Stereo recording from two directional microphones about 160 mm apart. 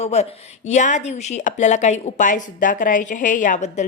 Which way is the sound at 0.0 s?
45° left (ahead or behind).